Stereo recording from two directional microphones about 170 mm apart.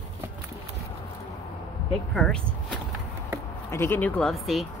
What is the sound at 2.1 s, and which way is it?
Speech, 5° left (ahead or behind).